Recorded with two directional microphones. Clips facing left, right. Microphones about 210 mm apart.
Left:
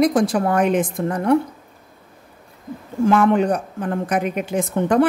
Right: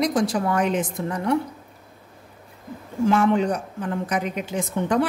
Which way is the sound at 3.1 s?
55° left (ahead or behind).